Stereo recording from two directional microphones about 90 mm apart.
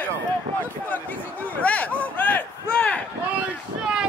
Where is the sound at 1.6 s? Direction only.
15° left (ahead or behind).